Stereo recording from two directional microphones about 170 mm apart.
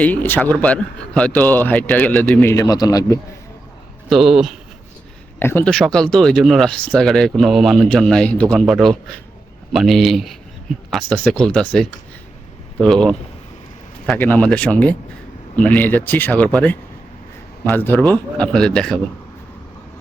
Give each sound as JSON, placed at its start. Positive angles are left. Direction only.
{"t": 0.0, "sound": "a man's voice", "side_deg": 10}
{"t": 4.1, "sound": "speech", "side_deg": 0}
{"t": 5.4, "sound": "speech", "side_deg": 10}
{"t": 14.2, "sound": "a man's voice", "side_deg": 10}